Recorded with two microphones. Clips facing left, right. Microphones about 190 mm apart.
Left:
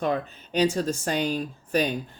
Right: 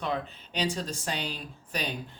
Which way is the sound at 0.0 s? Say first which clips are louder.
Left 6 dB; 45° left (ahead or behind).